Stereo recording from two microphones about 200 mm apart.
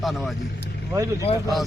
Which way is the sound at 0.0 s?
Centre (ahead or behind).